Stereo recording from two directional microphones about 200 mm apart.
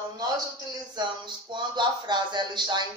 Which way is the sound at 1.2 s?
20° right (ahead or behind).